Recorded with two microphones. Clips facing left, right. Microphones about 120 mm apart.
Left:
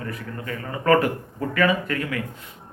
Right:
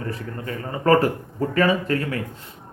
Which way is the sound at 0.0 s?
30° right (ahead or behind).